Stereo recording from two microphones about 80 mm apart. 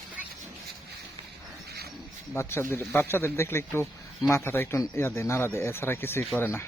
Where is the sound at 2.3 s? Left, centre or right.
Left.